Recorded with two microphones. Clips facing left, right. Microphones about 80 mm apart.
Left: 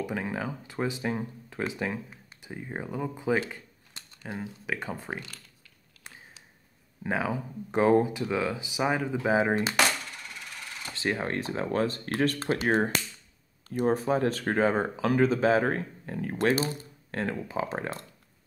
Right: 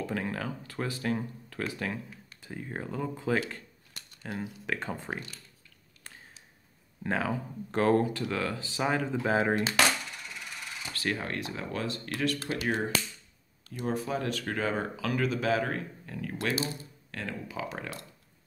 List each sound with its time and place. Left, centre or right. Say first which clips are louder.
0.0 s speech: left 1 dB; centre
7.0 s speech: left 1 dB; centre
10.9 s speech: left 3 dB; left